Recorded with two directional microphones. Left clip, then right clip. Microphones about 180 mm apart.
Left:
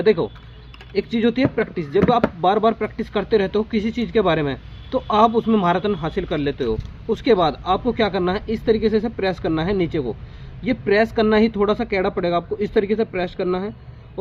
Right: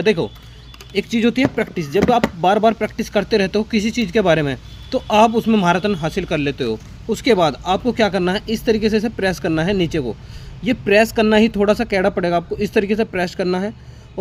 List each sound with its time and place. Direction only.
0.0 s a man's voice: 35° right (ahead or behind)